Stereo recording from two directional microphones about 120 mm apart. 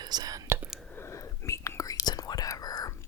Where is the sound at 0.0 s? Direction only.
35° right (ahead or behind).